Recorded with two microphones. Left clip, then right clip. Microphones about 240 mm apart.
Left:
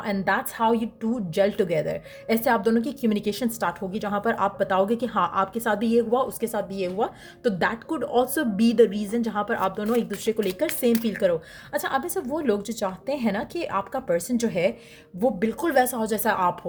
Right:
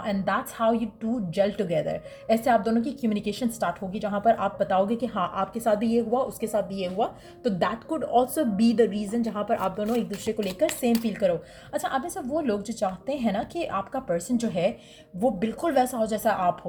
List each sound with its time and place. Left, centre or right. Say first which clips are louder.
0.0 s a woman's voice: left 2 dB; left